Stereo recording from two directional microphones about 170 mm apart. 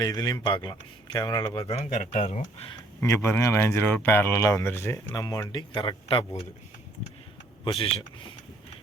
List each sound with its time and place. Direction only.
0.0 s speech: 20° left (ahead or behind)
1.7 s speech: 35° left (ahead or behind)
3.0 s speech: 15° left (ahead or behind); by 6.4 s 30° left (ahead or behind)
7.6 s speech: 35° left (ahead or behind)